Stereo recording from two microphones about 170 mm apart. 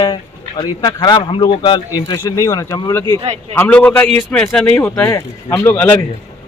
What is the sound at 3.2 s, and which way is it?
Speech, 35° right (ahead or behind).